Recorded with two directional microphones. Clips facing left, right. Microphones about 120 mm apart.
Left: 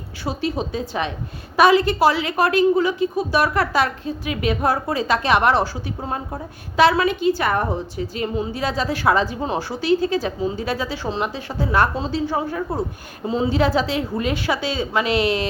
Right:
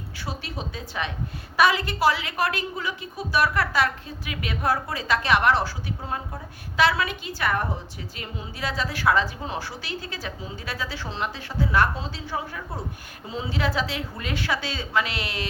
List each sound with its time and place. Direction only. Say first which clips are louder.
0.3 s a woman's voice: left 10 dB; 25° left (ahead or behind)
11.6 s a woman's voice: left 3 dB; 30° left (ahead or behind)